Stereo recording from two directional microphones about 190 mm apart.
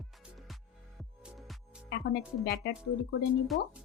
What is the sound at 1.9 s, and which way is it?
Music, 60° left (ahead or behind).